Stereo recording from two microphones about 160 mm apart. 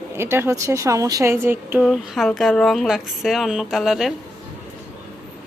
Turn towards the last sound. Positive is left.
turn(degrees=0)  # may be behind; listen again after turning